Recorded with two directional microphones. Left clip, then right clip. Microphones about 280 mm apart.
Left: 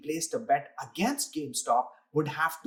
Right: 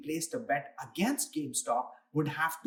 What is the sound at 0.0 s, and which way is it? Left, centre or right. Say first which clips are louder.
Speech: left 4 dB; centre.